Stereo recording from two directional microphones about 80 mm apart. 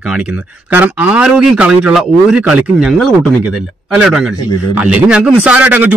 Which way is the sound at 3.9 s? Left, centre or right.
Centre.